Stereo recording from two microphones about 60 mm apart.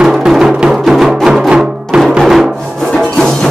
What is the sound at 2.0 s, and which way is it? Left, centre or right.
Music, centre.